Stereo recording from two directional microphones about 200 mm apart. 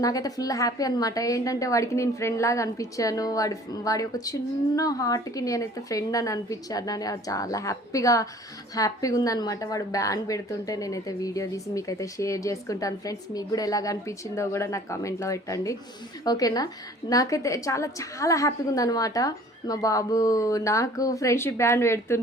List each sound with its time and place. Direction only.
0.0 s a woman's voice: 20° left (ahead or behind)